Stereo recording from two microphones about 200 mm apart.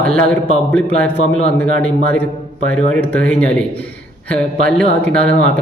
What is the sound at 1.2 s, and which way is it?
Speech, 30° left (ahead or behind).